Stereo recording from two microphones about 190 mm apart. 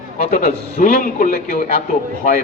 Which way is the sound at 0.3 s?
45° left (ahead or behind).